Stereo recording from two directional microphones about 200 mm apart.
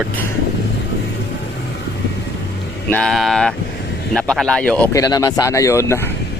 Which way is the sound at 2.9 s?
5° left (ahead or behind).